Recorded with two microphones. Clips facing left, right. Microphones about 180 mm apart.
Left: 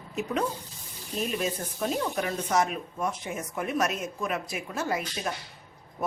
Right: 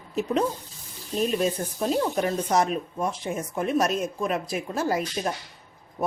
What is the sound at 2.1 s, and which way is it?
Speech, 35° right (ahead or behind).